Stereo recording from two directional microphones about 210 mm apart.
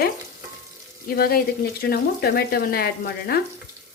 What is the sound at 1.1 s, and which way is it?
Frying, 50° left (ahead or behind).